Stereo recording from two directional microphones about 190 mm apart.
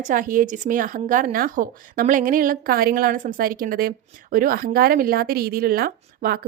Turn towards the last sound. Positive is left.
turn(degrees=-50)  # may be behind; listen again after turning